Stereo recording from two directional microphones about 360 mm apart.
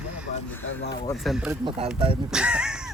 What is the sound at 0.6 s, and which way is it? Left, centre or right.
Speech, left.